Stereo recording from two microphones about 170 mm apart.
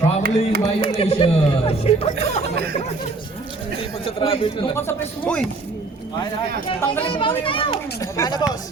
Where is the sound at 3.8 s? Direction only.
30° left (ahead or behind).